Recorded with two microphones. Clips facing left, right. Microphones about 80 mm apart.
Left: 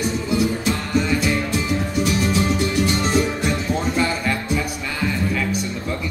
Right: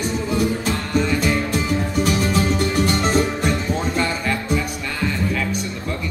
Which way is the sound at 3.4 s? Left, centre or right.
Centre.